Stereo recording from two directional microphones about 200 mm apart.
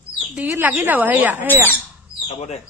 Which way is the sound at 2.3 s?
35° left (ahead or behind).